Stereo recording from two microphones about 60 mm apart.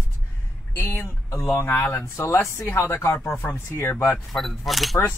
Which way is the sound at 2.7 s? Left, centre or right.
Left.